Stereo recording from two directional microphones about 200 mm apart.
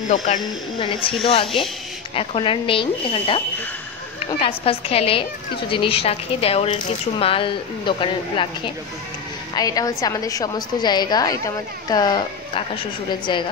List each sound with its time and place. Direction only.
0.4 s speech: 25° left (ahead or behind)